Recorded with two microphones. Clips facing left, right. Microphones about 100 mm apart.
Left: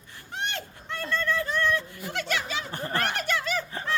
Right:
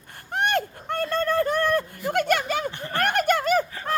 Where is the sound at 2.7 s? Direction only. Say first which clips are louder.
Right 1 dB; 40° left (ahead or behind).